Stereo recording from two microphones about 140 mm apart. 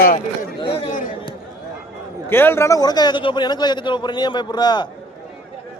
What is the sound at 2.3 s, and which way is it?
A man's voice, 15° left (ahead or behind).